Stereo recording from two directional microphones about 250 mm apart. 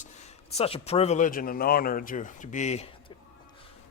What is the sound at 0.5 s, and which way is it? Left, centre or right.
Speech, left.